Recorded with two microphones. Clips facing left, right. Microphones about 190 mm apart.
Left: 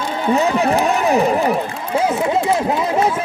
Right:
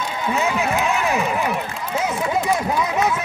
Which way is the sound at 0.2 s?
35° left (ahead or behind).